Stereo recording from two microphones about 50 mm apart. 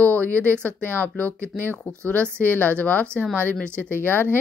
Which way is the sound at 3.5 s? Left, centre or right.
Left.